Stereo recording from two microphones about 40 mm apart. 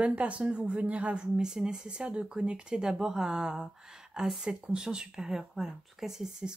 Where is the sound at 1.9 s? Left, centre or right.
Right; by 6.5 s centre.